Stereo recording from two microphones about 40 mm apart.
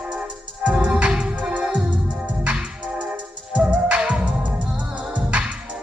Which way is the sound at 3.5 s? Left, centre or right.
Right.